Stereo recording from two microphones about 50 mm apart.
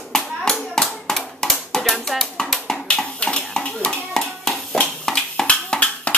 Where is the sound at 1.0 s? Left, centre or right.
Centre.